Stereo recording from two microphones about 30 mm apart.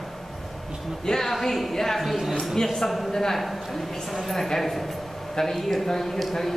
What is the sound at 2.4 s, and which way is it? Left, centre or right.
Speech, centre.